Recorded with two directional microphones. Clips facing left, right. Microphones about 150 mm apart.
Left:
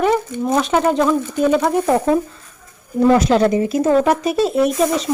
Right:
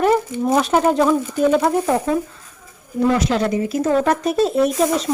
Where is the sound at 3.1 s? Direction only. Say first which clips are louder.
Left 6 dB; 35° left (ahead or behind).